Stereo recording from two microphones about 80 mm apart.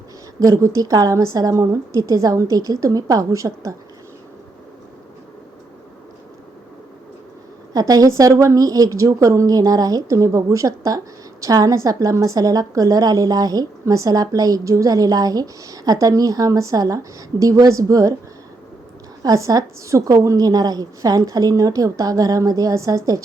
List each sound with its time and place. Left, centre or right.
0.3 s a woman's voice: right
7.7 s a woman's voice: right
19.2 s a woman's voice: right